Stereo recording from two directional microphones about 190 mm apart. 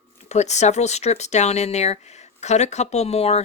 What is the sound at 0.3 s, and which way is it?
Speech, 35° left (ahead or behind).